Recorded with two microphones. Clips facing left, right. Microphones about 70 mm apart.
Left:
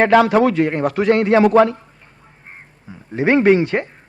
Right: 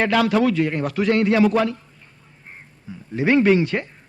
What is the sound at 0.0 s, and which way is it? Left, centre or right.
A man's voice, left.